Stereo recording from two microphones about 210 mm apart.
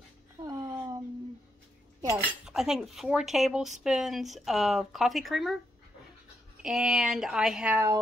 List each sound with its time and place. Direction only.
0.4 s a sound: 20° right (ahead or behind)
2.1 s speech: centre (ahead or behind)
6.6 s speech: 5° right (ahead or behind)